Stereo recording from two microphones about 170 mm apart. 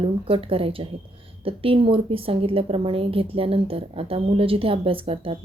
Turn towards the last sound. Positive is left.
turn(degrees=-35)  # may be behind; listen again after turning